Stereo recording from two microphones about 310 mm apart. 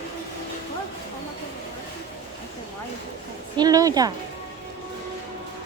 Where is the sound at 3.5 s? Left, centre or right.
Centre.